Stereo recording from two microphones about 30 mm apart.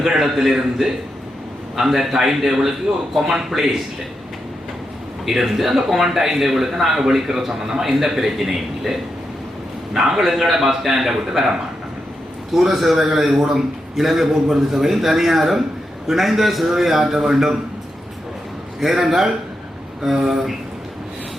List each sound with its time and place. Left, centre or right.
0.2 s a man's voice: centre
1.7 s a man's voice: centre
2.9 s a man's voice: centre
5.2 s a man's voice: centre
12.5 s a man's voice: centre
14.4 s a man's voice: centre
18.8 s a man's voice: centre